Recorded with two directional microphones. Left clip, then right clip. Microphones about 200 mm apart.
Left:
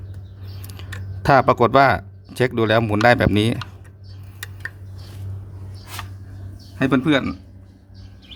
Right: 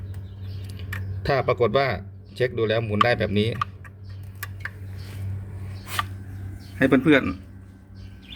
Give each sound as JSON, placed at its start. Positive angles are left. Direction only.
{"t": 0.6, "sound": "speech", "side_deg": 45}
{"t": 6.7, "sound": "a man's voice", "side_deg": 25}